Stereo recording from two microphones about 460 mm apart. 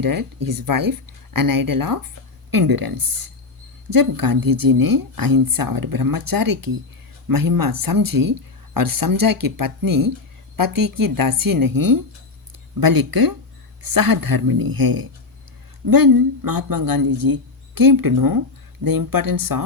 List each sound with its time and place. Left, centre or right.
0.0 s speech: right